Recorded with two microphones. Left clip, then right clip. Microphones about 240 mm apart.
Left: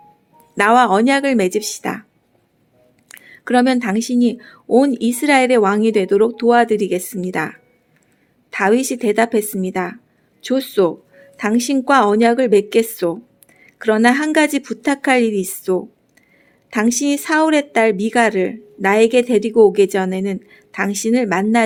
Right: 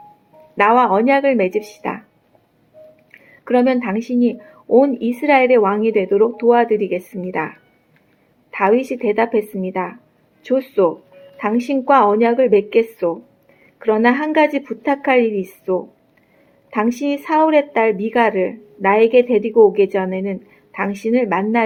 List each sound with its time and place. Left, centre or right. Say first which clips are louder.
0.5 s a woman's voice: left 1 dB; left
3.2 s a woman's voice: even; left